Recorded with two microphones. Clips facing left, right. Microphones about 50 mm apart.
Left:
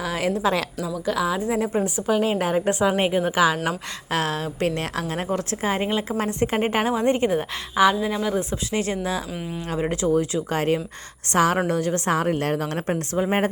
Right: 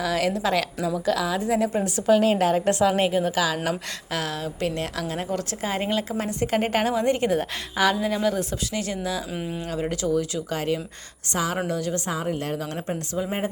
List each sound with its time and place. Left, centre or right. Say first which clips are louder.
0.0 s a woman's voice: left 1 dB; centre
4.1 s a woman's voice: left 4 dB; left
6.6 s a woman's voice: even; centre
8.7 s a woman's voice: left 5 dB; left
9.3 s speech: right 1 dB; centre
9.6 s a woman's voice: left 4 dB; left